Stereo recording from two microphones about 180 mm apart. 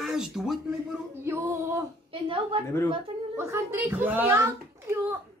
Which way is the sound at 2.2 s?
30° right (ahead or behind).